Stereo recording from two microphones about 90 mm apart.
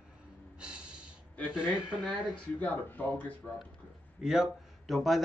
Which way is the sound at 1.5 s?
10° right (ahead or behind).